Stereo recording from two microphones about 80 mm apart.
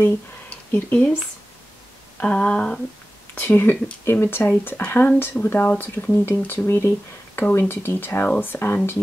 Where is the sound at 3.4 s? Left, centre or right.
Left.